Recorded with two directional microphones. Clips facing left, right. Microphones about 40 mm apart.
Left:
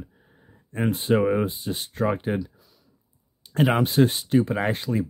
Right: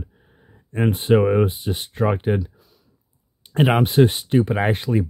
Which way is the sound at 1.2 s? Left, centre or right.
Centre.